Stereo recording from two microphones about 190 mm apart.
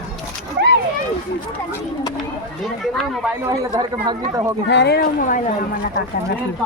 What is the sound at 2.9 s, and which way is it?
Speech, centre (ahead or behind).